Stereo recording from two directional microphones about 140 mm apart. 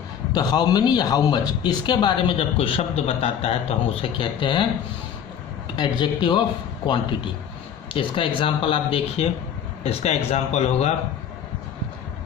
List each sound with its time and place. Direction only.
0.3 s speech: 30° left (ahead or behind)
5.7 s speech: 30° left (ahead or behind); by 10.9 s 50° left (ahead or behind)